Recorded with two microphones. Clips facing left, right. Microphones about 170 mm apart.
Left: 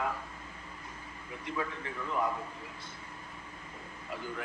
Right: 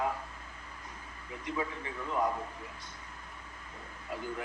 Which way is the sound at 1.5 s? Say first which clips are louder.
Even; 15° right (ahead or behind).